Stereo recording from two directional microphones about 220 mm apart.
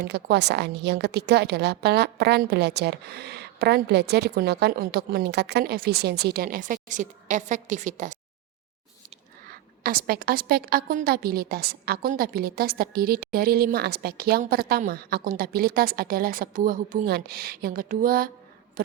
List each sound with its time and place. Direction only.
0.1 s a woman's voice: 50° right (ahead or behind)
9.5 s a woman's voice: 40° right (ahead or behind)